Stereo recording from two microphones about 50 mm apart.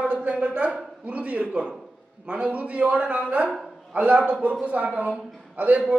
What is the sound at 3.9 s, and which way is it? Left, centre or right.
A man's voice, right.